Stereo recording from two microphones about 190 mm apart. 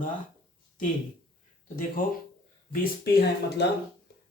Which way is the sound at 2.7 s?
55° left (ahead or behind).